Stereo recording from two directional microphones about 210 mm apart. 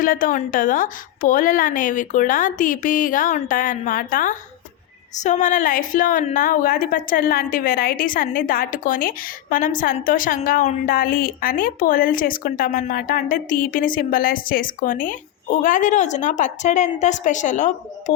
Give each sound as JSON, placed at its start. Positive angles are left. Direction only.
{"t": 0.0, "sound": "a woman's voice", "side_deg": 40}